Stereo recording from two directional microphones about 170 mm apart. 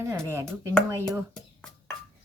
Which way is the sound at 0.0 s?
15° right (ahead or behind).